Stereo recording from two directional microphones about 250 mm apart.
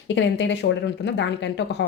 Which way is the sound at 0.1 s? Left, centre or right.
Left.